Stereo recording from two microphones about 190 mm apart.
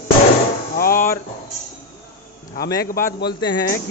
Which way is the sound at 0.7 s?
50° left (ahead or behind).